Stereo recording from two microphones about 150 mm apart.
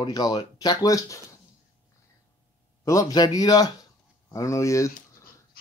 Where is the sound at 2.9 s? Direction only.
20° left (ahead or behind).